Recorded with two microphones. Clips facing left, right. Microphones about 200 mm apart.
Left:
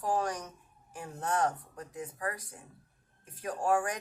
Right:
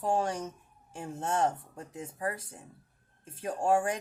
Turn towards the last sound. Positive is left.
turn(degrees=-25)  # may be behind; listen again after turning